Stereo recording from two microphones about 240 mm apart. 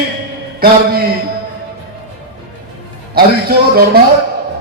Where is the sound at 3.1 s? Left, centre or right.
Right.